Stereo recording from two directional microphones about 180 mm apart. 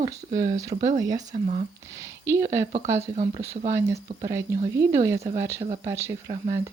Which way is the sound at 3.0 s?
35° right (ahead or behind).